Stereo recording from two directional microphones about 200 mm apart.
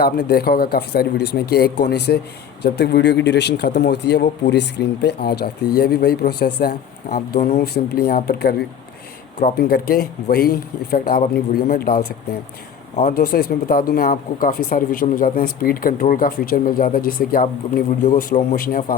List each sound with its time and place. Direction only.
0.0 s speech: 50° left (ahead or behind)
13.0 s speech: 45° left (ahead or behind)